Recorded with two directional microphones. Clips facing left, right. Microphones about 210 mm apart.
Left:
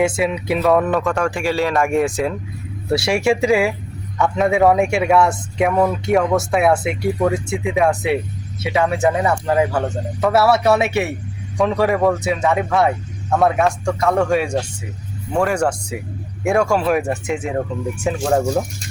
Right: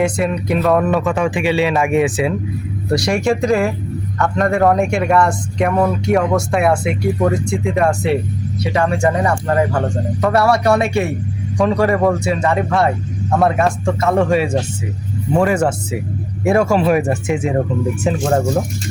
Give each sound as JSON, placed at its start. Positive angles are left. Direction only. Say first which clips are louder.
{"t": 0.0, "sound": "speech", "louder": "right 1 dB", "side_deg": 5}
{"t": 1.4, "sound": "speech", "louder": "right 3 dB", "side_deg": -15}
{"t": 1.7, "sound": "speech", "louder": "right 2 dB", "side_deg": 0}